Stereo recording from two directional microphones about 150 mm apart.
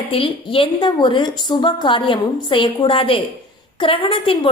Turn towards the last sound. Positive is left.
turn(degrees=35)  # may be behind; listen again after turning